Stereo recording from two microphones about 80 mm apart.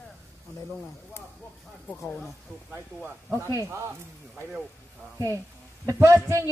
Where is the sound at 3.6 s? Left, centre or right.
Right.